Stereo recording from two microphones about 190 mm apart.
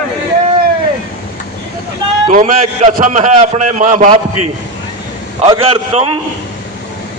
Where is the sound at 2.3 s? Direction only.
45° right (ahead or behind).